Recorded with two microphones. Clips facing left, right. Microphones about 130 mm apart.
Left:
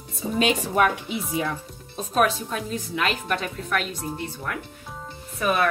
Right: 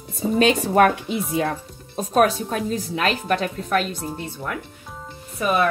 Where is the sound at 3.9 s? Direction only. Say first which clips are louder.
Right 2 dB; centre (ahead or behind).